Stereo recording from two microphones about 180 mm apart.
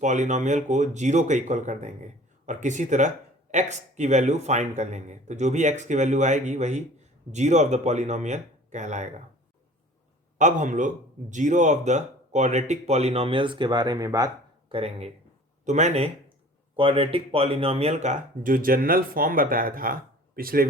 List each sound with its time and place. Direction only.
0.0 s speech: 40° right (ahead or behind)
10.3 s speech: 45° right (ahead or behind); by 14.3 s 20° right (ahead or behind)
14.7 s speech: 35° right (ahead or behind); by 20.7 s 55° right (ahead or behind)